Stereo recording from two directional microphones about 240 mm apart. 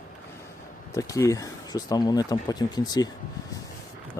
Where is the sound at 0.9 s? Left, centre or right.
Centre.